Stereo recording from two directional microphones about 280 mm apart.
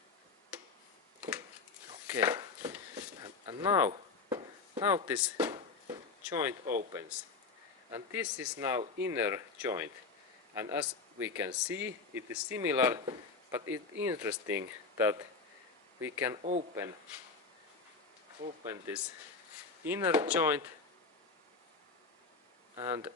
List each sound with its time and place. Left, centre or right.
2.0 s a sound: centre
7.9 s speech: centre
16.4 s speech: right
18.6 s speech: centre
22.7 s speech: centre